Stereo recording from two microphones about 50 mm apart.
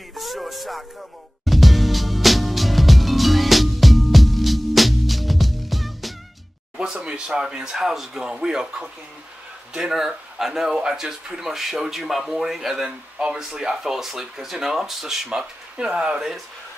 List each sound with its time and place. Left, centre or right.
0.1 s speech: centre
1.4 s music: centre
6.8 s speech: centre
15.8 s speech: centre